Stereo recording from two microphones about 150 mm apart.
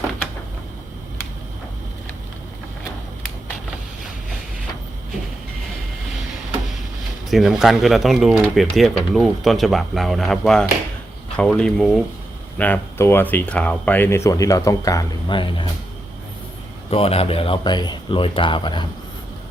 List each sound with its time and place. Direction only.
7.3 s speech: centre (ahead or behind)
14.3 s speech: 20° left (ahead or behind)
16.9 s a man's voice: 40° left (ahead or behind)